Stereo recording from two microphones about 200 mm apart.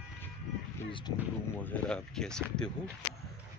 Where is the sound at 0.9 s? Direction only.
25° left (ahead or behind).